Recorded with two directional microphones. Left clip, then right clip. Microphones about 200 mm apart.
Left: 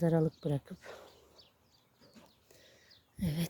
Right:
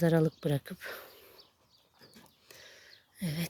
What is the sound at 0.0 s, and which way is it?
Speech, centre (ahead or behind).